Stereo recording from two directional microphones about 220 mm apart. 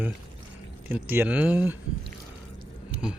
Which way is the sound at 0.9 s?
5° right (ahead or behind).